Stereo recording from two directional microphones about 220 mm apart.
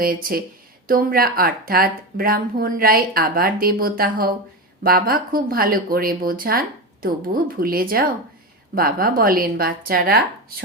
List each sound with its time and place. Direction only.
0.0 s speech: 40° right (ahead or behind)